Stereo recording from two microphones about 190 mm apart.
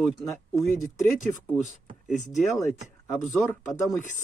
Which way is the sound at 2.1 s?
40° left (ahead or behind).